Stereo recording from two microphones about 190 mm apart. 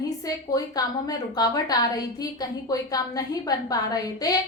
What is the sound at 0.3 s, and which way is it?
A woman's voice, 20° left (ahead or behind).